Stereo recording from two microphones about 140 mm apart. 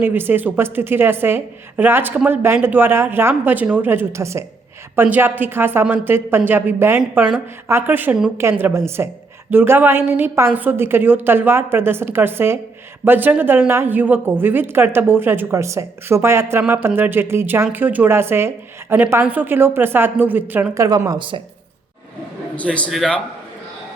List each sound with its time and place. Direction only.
0.0 s a woman's voice: 15° right (ahead or behind)
20.8 s speech: 25° right (ahead or behind)
22.5 s a man's voice: 10° left (ahead or behind)